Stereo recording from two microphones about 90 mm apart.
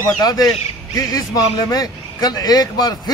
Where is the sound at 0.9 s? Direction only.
40° left (ahead or behind).